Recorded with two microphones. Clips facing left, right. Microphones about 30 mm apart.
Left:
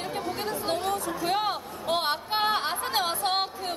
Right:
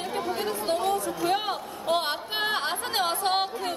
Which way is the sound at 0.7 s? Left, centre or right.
Right.